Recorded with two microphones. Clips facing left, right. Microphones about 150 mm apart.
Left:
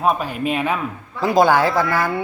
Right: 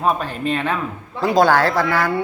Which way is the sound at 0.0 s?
5° left (ahead or behind).